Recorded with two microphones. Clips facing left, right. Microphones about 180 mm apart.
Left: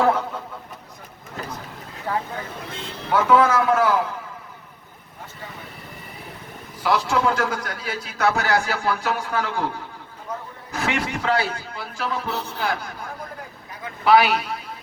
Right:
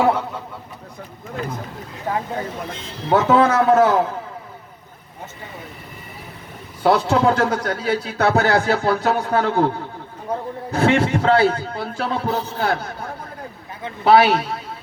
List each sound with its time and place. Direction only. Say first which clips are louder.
0.0 s a sound: right 2 dB; 10° right (ahead or behind)
2.1 s vehicle: right 2 dB; 20° right (ahead or behind)
3.1 s a man's voice: right 2 dB; 25° right (ahead or behind)
6.8 s a man's voice: right 5 dB; 30° right (ahead or behind)